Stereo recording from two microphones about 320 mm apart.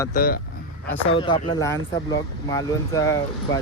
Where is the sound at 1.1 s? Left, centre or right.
Centre.